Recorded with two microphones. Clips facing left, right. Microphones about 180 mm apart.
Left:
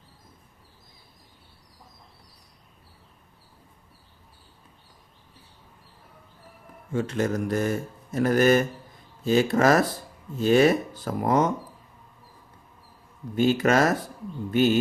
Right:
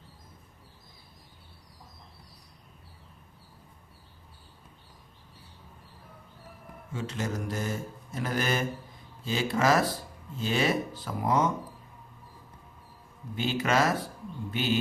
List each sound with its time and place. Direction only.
6.9 s speech: 55° left (ahead or behind)
13.3 s speech: 45° left (ahead or behind)